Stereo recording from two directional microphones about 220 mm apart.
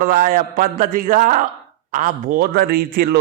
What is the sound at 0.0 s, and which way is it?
A man's voice, 40° right (ahead or behind).